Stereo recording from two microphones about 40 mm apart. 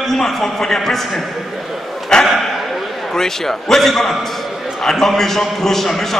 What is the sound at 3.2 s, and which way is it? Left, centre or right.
A man's voice, centre.